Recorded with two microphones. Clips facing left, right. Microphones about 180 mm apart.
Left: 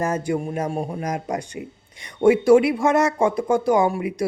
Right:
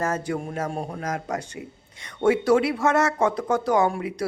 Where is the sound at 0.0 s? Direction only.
15° left (ahead or behind).